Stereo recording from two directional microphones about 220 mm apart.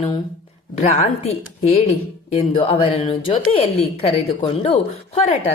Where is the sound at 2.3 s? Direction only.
25° left (ahead or behind).